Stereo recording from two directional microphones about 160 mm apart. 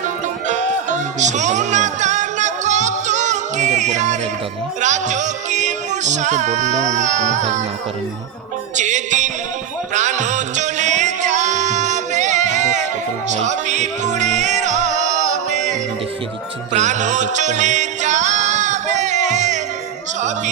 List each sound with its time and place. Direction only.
0.4 s music: 50° right (ahead or behind)
8.7 s music: 50° right (ahead or behind)
16.7 s music: 50° right (ahead or behind)